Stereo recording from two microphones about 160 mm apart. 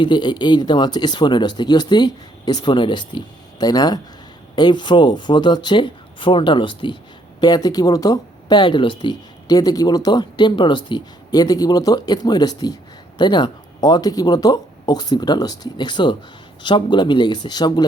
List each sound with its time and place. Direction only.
0.0 s speech: 30° left (ahead or behind)